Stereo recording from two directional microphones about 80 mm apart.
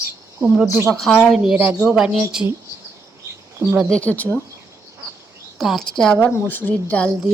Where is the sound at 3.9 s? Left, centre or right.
Centre.